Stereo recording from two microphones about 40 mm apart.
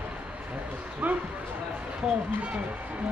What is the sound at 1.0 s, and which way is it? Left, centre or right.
Speech, right.